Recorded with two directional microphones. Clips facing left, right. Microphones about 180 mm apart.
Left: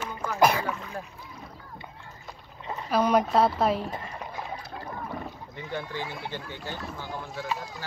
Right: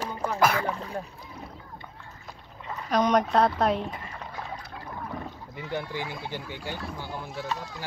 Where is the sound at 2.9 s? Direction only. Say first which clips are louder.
Even; 5° left (ahead or behind).